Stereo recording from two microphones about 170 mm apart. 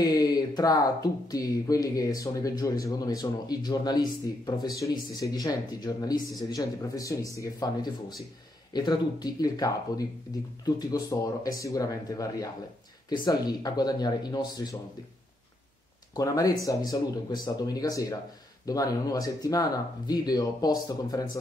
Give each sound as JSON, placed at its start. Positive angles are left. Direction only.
{"t": 0.0, "sound": "speech", "side_deg": 20}
{"t": 16.2, "sound": "speech", "side_deg": 20}